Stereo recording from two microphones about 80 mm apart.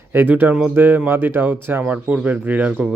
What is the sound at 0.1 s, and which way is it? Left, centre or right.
Speech, right.